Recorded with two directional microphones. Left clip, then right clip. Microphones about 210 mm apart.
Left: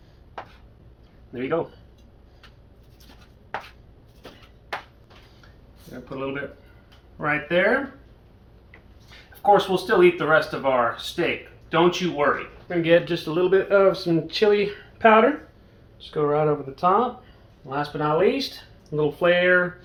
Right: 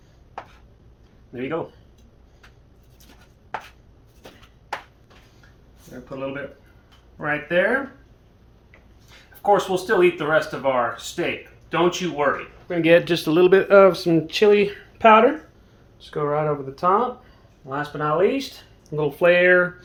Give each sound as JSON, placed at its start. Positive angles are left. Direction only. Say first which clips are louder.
{"t": 1.3, "sound": "speech", "louder": "left 1 dB", "side_deg": 0}
{"t": 5.9, "sound": "speech", "louder": "even", "side_deg": 5}
{"t": 9.4, "sound": "speech", "louder": "left 1 dB", "side_deg": -5}
{"t": 12.6, "sound": "speech", "louder": "right 3 dB", "side_deg": -45}
{"t": 17.7, "sound": "speech", "louder": "even", "side_deg": -20}
{"t": 18.9, "sound": "speech", "louder": "right 3 dB", "side_deg": -40}